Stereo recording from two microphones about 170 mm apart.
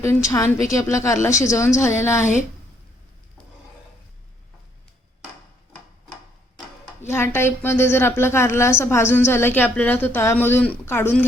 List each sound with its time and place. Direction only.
0.0 s a woman's voice: 15° left (ahead or behind)
7.0 s a woman's voice: 15° left (ahead or behind)